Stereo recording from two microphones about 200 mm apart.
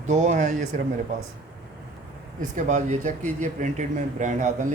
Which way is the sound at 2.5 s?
35° right (ahead or behind).